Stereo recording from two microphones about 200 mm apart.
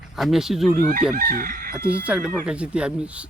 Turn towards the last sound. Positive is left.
turn(degrees=-5)  # may be behind; listen again after turning